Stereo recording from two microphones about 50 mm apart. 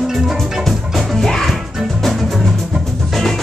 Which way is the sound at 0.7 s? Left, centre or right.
Centre.